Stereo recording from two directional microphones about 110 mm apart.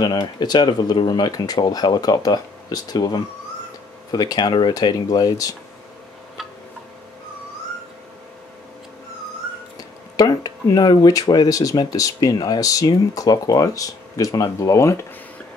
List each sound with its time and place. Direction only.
0.0 s speech: 40° left (ahead or behind)
9.8 s a sound: 35° left (ahead or behind)
11.8 s speech: 35° left (ahead or behind)